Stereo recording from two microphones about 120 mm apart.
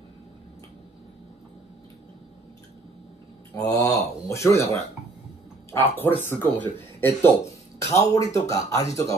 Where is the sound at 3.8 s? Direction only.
25° left (ahead or behind).